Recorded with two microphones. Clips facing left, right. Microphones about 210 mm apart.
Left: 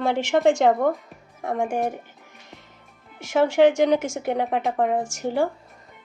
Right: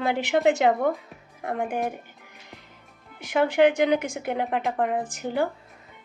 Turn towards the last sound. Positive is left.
turn(degrees=0)  # may be behind; listen again after turning